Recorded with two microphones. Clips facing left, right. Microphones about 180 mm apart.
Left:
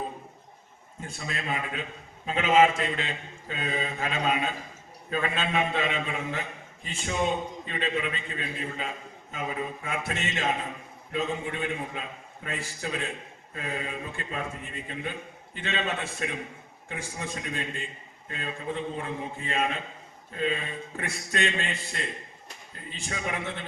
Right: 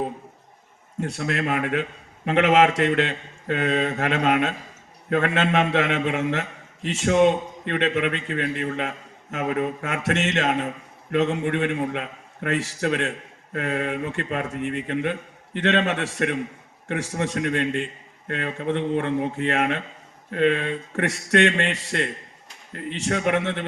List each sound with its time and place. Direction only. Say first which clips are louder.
1.0 s a man's voice: right 9 dB; 75° right (ahead or behind)